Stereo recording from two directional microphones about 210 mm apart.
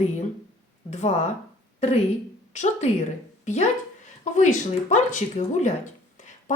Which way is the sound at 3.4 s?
35° left (ahead or behind).